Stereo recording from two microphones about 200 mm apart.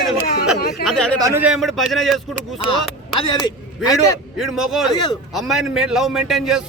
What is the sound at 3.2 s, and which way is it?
Speech, 25° left (ahead or behind).